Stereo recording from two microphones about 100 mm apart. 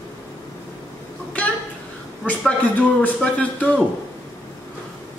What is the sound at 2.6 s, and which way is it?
A woman's voice, 15° left (ahead or behind).